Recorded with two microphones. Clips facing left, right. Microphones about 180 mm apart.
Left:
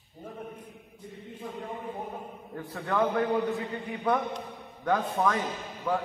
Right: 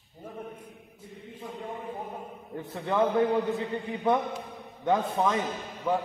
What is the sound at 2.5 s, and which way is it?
Speech, 20° right (ahead or behind).